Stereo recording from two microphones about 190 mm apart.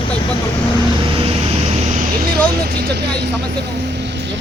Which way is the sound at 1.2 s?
35° right (ahead or behind).